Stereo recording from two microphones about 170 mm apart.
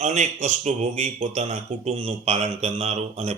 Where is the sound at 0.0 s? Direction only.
45° right (ahead or behind).